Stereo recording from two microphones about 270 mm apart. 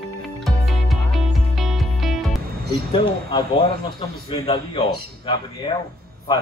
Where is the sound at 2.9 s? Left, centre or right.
Centre.